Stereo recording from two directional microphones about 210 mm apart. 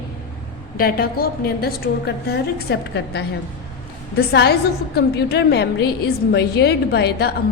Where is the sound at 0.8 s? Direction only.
45° left (ahead or behind).